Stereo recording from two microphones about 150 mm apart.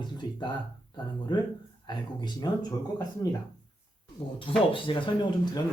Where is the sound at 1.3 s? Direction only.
30° left (ahead or behind).